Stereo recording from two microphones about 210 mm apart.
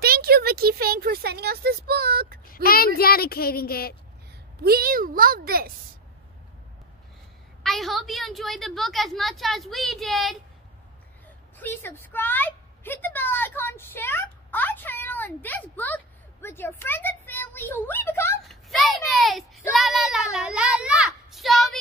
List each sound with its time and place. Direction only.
0.0 s speech: 45° right (ahead or behind)
2.4 s a sound: 45° left (ahead or behind)
3.0 s speech: 45° left (ahead or behind)
4.6 s speech: 45° right (ahead or behind)
7.6 s a woman's voice: centre (ahead or behind)
11.5 s a woman's voice: 10° left (ahead or behind)